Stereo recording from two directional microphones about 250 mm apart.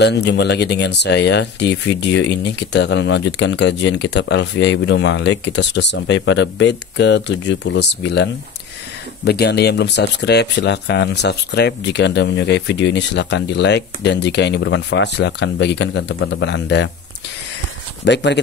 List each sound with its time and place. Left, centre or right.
0.0 s speech: left
18.0 s speech: left